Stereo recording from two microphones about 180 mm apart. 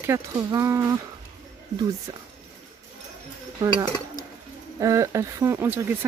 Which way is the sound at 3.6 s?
20° right (ahead or behind).